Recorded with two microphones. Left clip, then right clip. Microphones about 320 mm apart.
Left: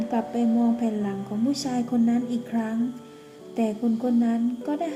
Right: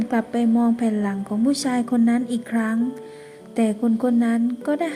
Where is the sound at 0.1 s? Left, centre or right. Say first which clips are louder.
Right 3 dB; right.